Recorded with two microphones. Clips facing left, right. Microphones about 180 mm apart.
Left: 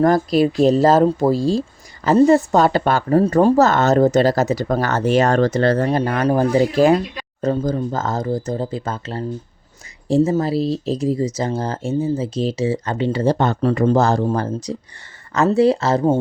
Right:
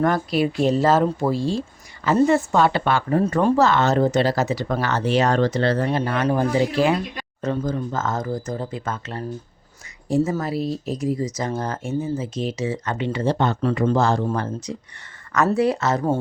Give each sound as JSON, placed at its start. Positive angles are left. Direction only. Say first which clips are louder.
{"t": 0.0, "sound": "speech", "louder": "left 5 dB", "side_deg": 40}